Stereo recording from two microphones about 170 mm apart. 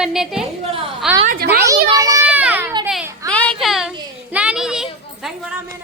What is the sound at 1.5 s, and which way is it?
Speech, 15° right (ahead or behind).